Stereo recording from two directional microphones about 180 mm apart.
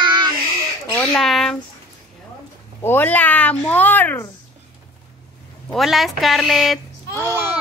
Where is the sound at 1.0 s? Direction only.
5° left (ahead or behind).